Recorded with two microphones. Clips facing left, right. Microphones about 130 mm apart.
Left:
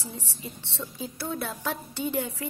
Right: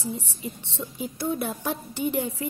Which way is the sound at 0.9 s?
15° right (ahead or behind).